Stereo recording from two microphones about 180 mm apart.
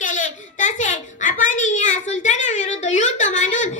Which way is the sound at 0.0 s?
45° left (ahead or behind).